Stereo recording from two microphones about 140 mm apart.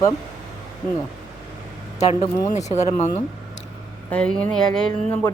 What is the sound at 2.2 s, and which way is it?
Speech, 55° left (ahead or behind).